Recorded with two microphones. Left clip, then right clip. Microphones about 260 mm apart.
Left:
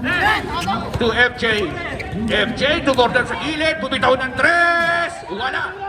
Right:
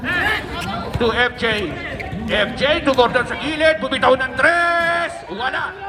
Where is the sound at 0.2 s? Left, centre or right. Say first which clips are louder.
Left 3 dB; centre.